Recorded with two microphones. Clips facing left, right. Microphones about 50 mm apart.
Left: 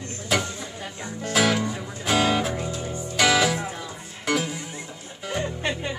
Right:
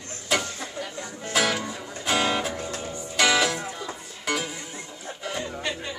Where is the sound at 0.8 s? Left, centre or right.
Centre.